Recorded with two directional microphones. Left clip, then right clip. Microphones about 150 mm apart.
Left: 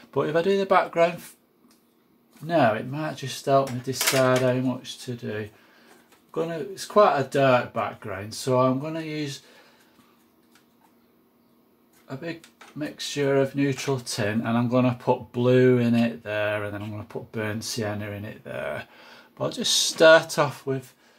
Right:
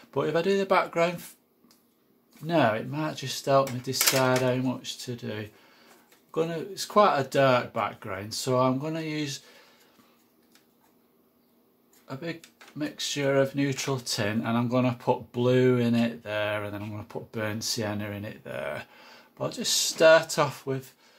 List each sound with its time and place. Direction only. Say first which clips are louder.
0.0 s speech: left 3 dB; centre (ahead or behind)
2.4 s speech: left 3 dB; 15° right (ahead or behind)
12.1 s speech: left 2 dB; 15° right (ahead or behind)
14.2 s speech: left 4 dB; 5° right (ahead or behind)